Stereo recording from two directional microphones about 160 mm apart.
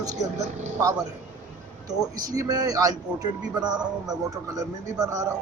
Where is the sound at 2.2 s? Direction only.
20° right (ahead or behind).